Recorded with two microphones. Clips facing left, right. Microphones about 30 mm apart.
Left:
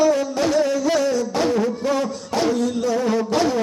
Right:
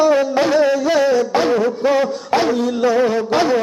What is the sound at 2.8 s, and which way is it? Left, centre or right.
Music, right.